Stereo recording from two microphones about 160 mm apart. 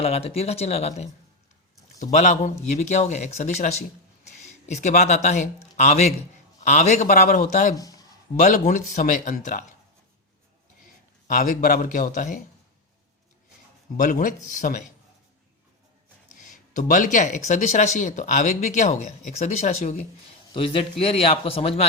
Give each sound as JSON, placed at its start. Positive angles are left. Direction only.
{"t": 0.0, "sound": "speech", "side_deg": 40}
{"t": 7.8, "sound": "a sound", "side_deg": 25}
{"t": 8.4, "sound": "speech", "side_deg": 50}
{"t": 11.3, "sound": "speech", "side_deg": 55}
{"t": 13.9, "sound": "speech", "side_deg": 55}
{"t": 16.7, "sound": "speech", "side_deg": 55}
{"t": 20.5, "sound": "speech", "side_deg": 35}